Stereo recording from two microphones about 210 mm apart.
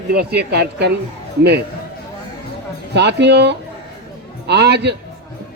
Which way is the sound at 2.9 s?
55° right (ahead or behind).